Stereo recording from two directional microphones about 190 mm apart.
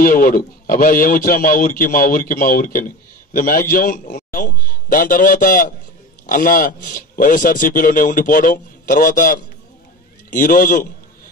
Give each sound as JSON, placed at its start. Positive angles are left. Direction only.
{"t": 0.0, "sound": "a man's voice", "side_deg": 45}